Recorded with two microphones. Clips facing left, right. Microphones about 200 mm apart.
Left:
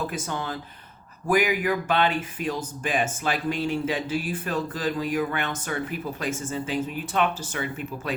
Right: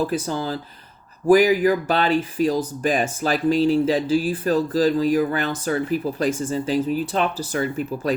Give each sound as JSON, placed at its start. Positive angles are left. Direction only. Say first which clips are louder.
{"t": 0.1, "sound": "speech", "louder": "right 7 dB", "side_deg": -35}